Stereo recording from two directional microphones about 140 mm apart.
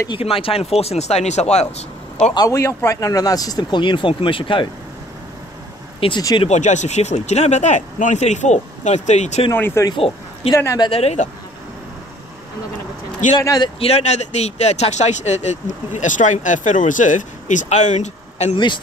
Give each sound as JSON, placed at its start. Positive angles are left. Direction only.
{"t": 0.1, "sound": "speech", "side_deg": 40}
{"t": 2.3, "sound": "speech", "side_deg": 25}
{"t": 5.9, "sound": "speech", "side_deg": 40}
{"t": 6.4, "sound": "speech", "side_deg": 55}
{"t": 9.5, "sound": "speech", "side_deg": 15}
{"t": 9.8, "sound": "speech", "side_deg": 40}
{"t": 10.5, "sound": "speech", "side_deg": 25}
{"t": 10.9, "sound": "speech", "side_deg": 50}
{"t": 13.4, "sound": "speech", "side_deg": 25}
{"t": 13.7, "sound": "speech", "side_deg": 45}